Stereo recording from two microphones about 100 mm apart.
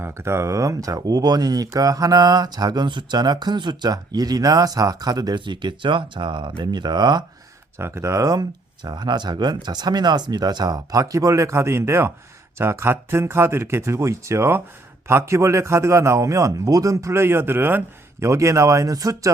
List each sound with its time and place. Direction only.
0.0 s speech: 25° right (ahead or behind); by 7.3 s 45° right (ahead or behind)
7.8 s a man's voice: 25° right (ahead or behind)